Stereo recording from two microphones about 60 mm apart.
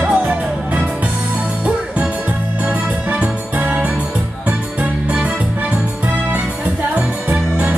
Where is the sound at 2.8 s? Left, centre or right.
Right.